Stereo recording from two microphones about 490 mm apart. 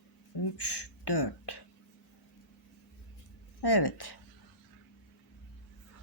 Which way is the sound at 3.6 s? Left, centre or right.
Left.